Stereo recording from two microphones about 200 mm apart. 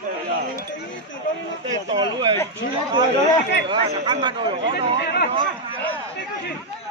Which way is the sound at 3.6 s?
25° right (ahead or behind).